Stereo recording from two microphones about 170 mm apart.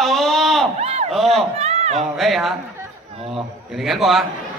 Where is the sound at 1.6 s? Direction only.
40° right (ahead or behind).